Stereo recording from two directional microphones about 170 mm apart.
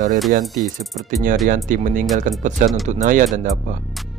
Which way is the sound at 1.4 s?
50° right (ahead or behind).